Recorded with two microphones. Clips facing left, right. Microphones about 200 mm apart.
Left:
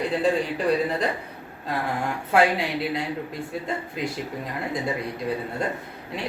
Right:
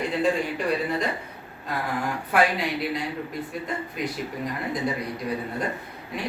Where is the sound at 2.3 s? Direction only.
25° left (ahead or behind).